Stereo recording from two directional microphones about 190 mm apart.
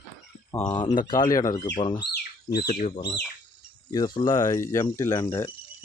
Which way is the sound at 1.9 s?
55° left (ahead or behind).